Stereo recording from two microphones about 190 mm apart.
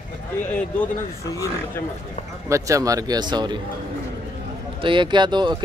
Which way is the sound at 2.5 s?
15° right (ahead or behind).